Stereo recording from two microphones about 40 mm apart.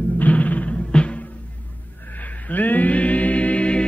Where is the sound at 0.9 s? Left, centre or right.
Left.